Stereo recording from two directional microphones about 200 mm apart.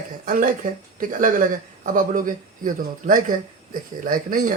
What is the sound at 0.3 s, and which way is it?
Speech, 45° right (ahead or behind).